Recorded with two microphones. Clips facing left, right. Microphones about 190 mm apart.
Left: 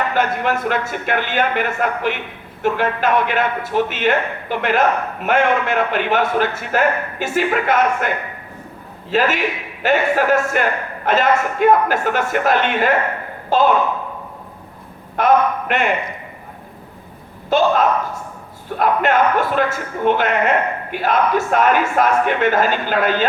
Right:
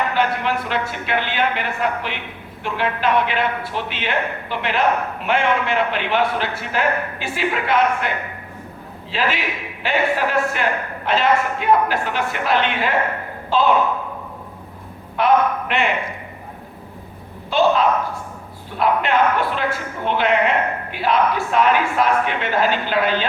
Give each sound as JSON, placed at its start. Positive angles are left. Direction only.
{"t": 0.1, "sound": "a man's voice", "side_deg": 45}
{"t": 15.1, "sound": "a sound", "side_deg": 45}
{"t": 17.5, "sound": "a man's voice", "side_deg": 45}